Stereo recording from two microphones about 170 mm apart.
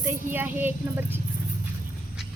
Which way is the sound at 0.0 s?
10° right (ahead or behind).